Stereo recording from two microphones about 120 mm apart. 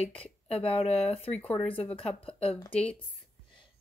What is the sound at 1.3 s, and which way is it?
Speech, 10° left (ahead or behind).